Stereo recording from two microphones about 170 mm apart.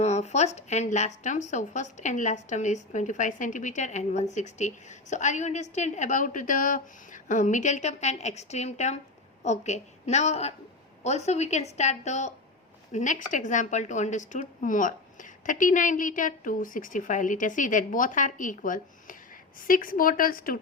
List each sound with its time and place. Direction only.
0.0 s a woman's voice: 40° left (ahead or behind); by 20.6 s 55° left (ahead or behind)